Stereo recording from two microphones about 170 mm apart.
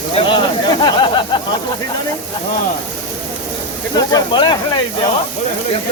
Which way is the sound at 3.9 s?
25° left (ahead or behind).